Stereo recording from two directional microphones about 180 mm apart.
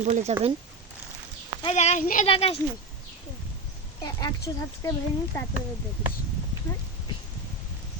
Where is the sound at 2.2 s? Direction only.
30° left (ahead or behind).